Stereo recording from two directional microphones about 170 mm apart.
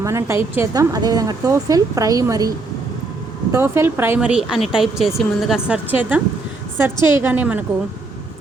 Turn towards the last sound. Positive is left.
turn(degrees=-10)  # may be behind; listen again after turning